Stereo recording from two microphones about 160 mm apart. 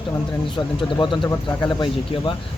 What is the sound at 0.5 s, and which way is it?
Speech, 30° left (ahead or behind).